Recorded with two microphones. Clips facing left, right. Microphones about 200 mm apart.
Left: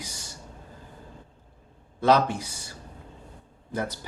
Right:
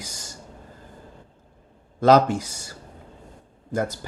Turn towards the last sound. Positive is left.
turn(degrees=-45)  # may be behind; listen again after turning